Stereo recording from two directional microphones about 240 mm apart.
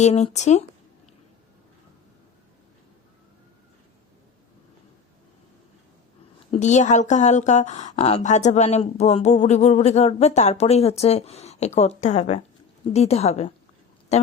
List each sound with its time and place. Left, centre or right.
0.0 s a woman's voice: left
6.5 s a woman's voice: left